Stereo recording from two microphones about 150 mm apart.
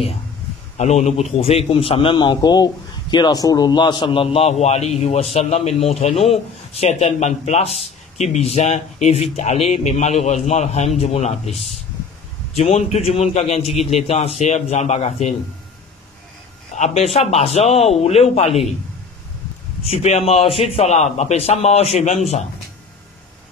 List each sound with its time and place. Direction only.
0.7 s a man's voice: 50° left (ahead or behind)
12.5 s speech: 45° left (ahead or behind)
16.7 s speech: 45° left (ahead or behind)
19.8 s speech: 45° left (ahead or behind)